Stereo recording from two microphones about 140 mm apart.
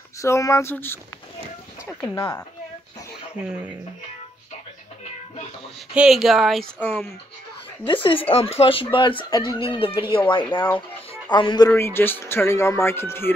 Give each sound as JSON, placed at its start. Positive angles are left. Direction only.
{"t": 0.2, "sound": "speech", "side_deg": 20}
{"t": 2.0, "sound": "speech", "side_deg": 30}
{"t": 5.9, "sound": "speech", "side_deg": 0}
{"t": 6.8, "sound": "speech", "side_deg": 15}
{"t": 7.8, "sound": "speech", "side_deg": 35}
{"t": 11.7, "sound": "speech", "side_deg": 15}